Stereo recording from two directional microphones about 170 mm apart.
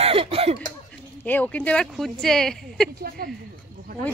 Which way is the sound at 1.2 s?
10° left (ahead or behind).